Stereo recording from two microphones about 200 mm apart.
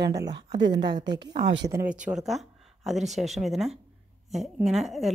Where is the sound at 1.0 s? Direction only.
60° right (ahead or behind).